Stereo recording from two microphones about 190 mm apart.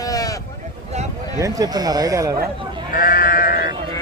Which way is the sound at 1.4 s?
15° right (ahead or behind).